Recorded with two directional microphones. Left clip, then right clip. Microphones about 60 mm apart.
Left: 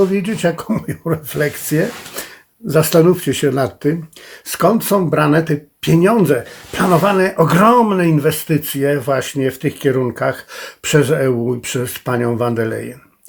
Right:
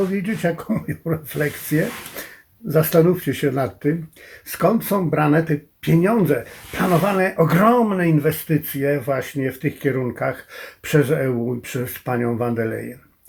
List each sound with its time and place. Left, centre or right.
0.1 s speech: left